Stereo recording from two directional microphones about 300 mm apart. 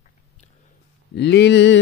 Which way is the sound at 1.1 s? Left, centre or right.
Left.